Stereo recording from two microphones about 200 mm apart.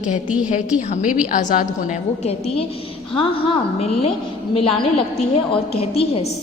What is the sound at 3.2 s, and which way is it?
Speech, 30° left (ahead or behind).